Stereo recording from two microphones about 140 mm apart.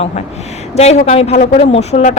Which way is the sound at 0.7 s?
50° left (ahead or behind).